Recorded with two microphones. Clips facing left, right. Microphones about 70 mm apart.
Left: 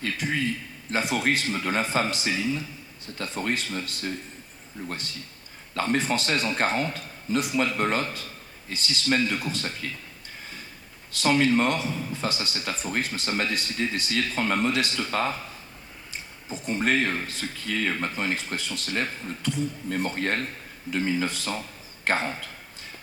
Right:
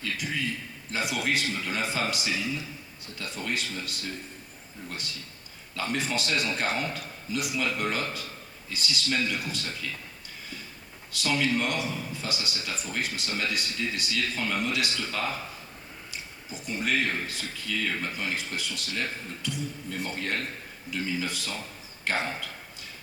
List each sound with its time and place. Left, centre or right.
0.0 s speech: left
5.7 s speech: left
11.1 s speech: left
16.5 s speech: left